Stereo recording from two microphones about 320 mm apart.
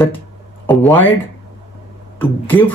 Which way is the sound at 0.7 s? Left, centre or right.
Centre.